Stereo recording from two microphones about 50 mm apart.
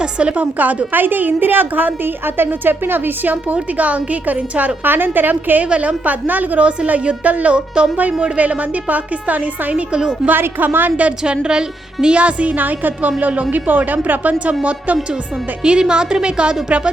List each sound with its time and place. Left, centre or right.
0.0 s a woman's voice: right
0.6 s a woman's voice: right
5.6 s a woman's voice: right
10.2 s a woman's voice: right
11.2 s a woman's voice: centre
12.5 s a woman's voice: right
15.6 s a woman's voice: centre